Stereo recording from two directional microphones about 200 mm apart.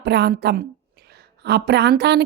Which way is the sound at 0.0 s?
55° right (ahead or behind).